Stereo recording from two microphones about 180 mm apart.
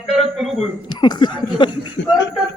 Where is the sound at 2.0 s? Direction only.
90° left.